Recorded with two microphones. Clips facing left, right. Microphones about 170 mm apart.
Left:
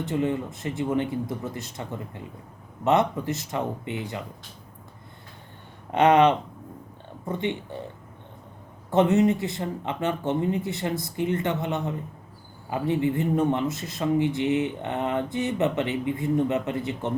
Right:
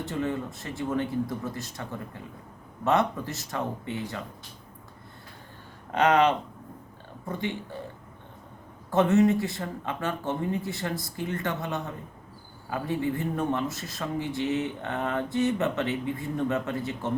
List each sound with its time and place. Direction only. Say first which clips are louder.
0.0 s speech: left 4 dB; 20° left (ahead or behind)
5.9 s speech: left 4 dB; 20° left (ahead or behind)
8.9 s speech: left 1 dB; 20° left (ahead or behind)